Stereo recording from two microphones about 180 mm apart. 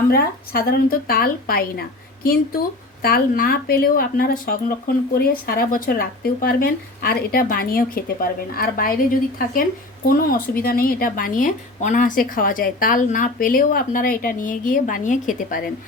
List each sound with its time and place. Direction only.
0.1 s a woman's voice: 55° left (ahead or behind)